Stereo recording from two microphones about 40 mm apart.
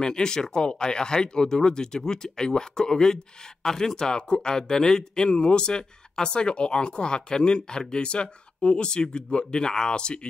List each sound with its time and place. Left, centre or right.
0.0 s speech: centre